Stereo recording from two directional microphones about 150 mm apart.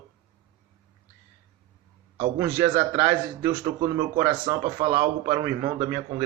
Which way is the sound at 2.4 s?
20° right (ahead or behind).